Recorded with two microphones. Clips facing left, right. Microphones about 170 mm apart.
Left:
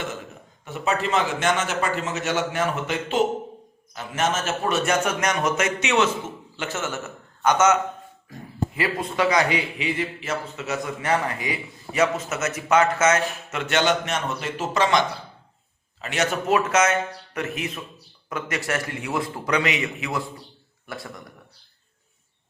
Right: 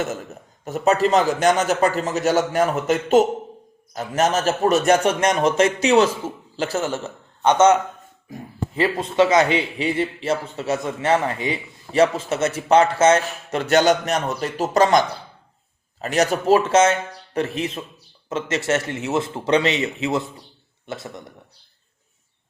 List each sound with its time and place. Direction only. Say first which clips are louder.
0.0 s a man's voice: right 6 dB; 40° right (ahead or behind); by 21.3 s 20° right (ahead or behind)